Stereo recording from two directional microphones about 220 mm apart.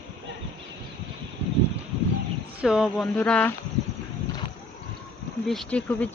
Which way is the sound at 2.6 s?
5° right (ahead or behind).